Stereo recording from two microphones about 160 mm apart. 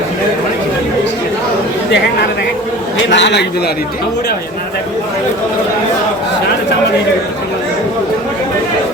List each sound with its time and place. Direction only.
3.2 s a man's voice: 90° left